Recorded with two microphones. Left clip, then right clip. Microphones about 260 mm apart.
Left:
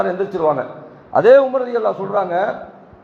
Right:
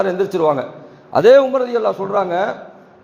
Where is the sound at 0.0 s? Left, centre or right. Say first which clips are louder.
Right 1 dB; right.